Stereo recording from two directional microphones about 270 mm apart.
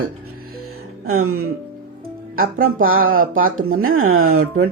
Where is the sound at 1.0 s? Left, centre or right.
Right.